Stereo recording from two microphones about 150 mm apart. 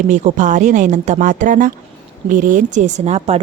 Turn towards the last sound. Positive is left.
turn(degrees=-45)  # may be behind; listen again after turning